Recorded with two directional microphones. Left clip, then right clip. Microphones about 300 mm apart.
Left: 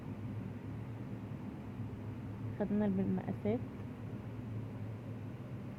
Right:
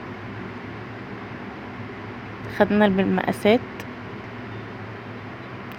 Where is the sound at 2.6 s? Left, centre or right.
Centre.